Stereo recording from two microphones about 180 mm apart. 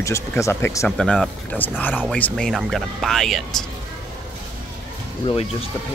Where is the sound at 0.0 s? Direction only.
15° left (ahead or behind).